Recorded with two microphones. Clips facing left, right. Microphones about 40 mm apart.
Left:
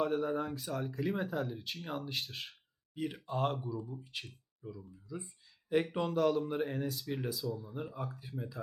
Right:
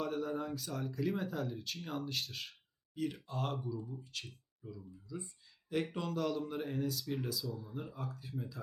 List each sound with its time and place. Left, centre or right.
0.0 s speech: centre
5.0 s a sound: left
6.1 s speech: centre
7.4 s speech: centre
7.7 s speech: centre